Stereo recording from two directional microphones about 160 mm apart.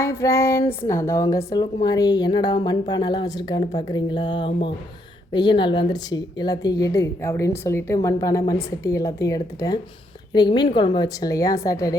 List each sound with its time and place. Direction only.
0.0 s speech: 20° left (ahead or behind)